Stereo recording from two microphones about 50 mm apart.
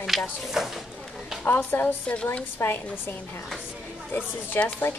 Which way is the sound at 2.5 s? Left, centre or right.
Left.